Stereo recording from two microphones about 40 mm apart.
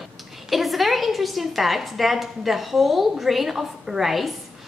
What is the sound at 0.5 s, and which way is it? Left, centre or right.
A woman's voice, centre.